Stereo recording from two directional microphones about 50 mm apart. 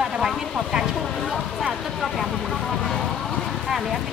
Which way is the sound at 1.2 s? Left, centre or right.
Centre.